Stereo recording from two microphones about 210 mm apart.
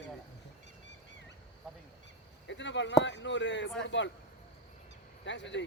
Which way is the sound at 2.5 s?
60° left (ahead or behind).